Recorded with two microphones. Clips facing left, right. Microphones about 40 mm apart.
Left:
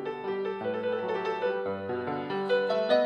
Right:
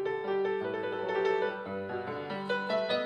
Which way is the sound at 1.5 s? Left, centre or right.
Left.